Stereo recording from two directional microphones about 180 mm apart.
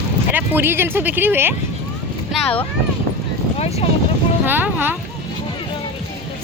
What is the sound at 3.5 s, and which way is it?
Speech, 35° left (ahead or behind).